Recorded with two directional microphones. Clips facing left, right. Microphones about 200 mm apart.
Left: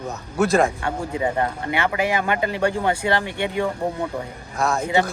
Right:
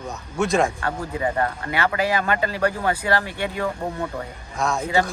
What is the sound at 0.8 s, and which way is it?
Speech, 20° left (ahead or behind).